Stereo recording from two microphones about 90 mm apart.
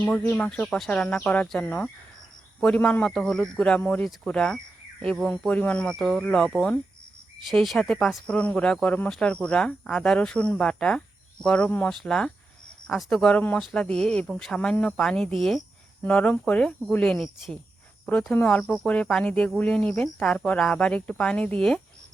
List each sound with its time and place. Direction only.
0.0 s speech: 10° left (ahead or behind)
3.8 s speech: 20° left (ahead or behind)
4.0 s speech: 5° left (ahead or behind)
6.0 s speech: centre (ahead or behind)
13.3 s speech: 15° left (ahead or behind)
13.6 s speech: 5° left (ahead or behind)
16.0 s speech: 15° left (ahead or behind)
18.6 s speech: centre (ahead or behind)
19.2 s speech: 15° left (ahead or behind)